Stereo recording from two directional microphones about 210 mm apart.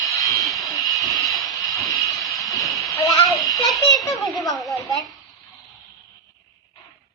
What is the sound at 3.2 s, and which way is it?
A child's voice, centre (ahead or behind).